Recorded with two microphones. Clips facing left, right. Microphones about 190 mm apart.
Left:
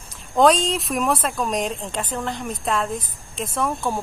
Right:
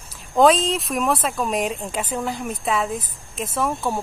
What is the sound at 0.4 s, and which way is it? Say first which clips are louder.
Speech: right 1 dB; centre (ahead or behind).